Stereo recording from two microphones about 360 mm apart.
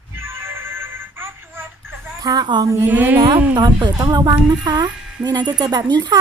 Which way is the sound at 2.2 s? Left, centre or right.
Centre.